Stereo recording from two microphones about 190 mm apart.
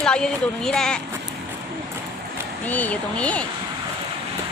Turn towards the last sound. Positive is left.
turn(degrees=5)  # may be behind; listen again after turning